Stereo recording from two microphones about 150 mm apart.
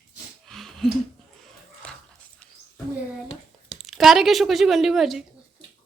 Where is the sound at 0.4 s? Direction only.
Centre (ahead or behind).